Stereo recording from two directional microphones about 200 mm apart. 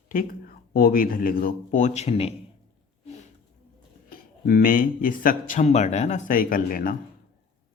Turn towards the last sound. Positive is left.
turn(degrees=45)  # may be behind; listen again after turning